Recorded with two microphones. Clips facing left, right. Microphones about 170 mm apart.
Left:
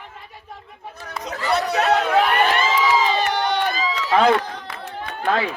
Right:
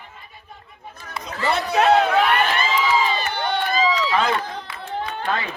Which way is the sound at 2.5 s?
80° left.